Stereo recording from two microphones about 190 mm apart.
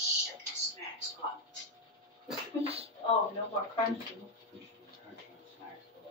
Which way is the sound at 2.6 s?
30° right (ahead or behind).